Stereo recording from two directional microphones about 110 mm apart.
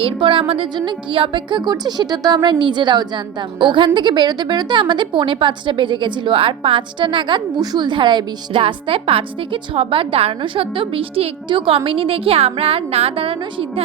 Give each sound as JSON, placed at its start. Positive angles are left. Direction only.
{"t": 0.0, "sound": "a woman's voice", "side_deg": -50}
{"t": 8.6, "sound": "a woman's voice", "side_deg": -60}